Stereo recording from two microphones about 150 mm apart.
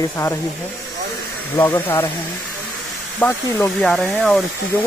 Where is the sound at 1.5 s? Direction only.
15° left (ahead or behind).